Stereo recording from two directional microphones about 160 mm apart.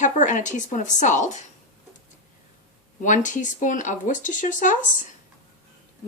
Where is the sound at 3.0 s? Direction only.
50° left (ahead or behind).